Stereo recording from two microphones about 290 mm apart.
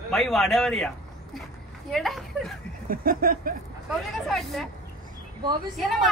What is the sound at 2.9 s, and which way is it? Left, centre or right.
Chuckle, right.